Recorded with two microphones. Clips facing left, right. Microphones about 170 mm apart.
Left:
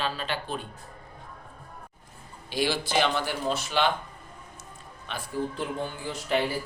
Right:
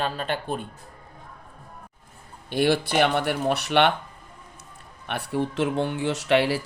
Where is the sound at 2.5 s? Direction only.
60° right (ahead or behind).